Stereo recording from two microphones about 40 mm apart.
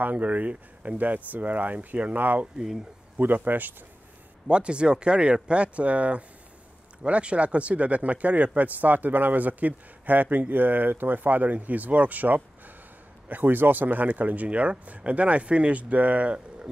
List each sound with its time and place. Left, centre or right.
0.0 s speech: right
3.2 s speech: right
4.5 s speech: right
14.0 s speech: right